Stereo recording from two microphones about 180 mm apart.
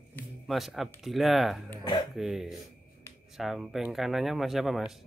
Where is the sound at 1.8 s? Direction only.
25° left (ahead or behind).